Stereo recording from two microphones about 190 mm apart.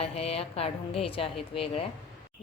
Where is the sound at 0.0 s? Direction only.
30° left (ahead or behind).